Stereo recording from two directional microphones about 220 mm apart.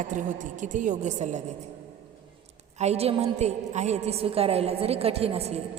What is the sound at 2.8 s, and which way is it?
A woman's voice, 30° right (ahead or behind).